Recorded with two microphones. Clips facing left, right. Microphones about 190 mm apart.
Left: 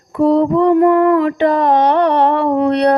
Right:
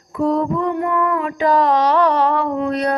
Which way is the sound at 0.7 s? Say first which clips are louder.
Left 9 dB; 55° left (ahead or behind).